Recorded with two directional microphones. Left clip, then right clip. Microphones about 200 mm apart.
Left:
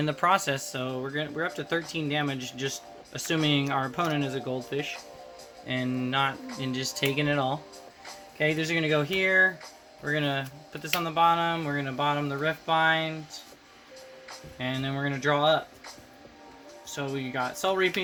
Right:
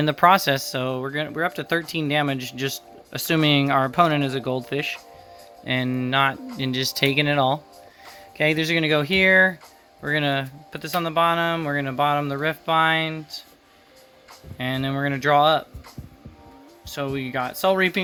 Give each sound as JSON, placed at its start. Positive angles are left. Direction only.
{"t": 0.0, "sound": "speech", "side_deg": -45}
{"t": 14.6, "sound": "speech", "side_deg": -50}
{"t": 16.9, "sound": "speech", "side_deg": -50}